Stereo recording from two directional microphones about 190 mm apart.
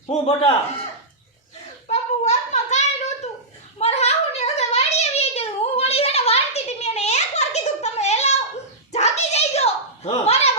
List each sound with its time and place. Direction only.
0.1 s a man's voice: 30° left (ahead or behind)
1.9 s child singing: 35° left (ahead or behind)
3.8 s a sound: 35° left (ahead or behind)